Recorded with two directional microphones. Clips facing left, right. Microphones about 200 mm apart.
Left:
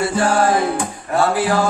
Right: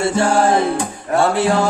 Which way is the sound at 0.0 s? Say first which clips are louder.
Right 1 dB; 25° right (ahead or behind).